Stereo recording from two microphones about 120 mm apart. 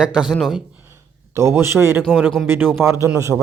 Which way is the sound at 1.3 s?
25° right (ahead or behind).